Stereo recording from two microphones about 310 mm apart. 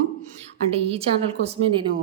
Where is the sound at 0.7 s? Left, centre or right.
Centre.